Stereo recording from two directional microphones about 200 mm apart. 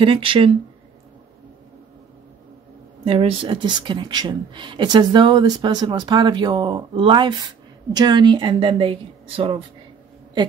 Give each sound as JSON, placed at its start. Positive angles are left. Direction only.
{"t": 0.0, "sound": "speech", "side_deg": -25}
{"t": 3.1, "sound": "speech", "side_deg": -30}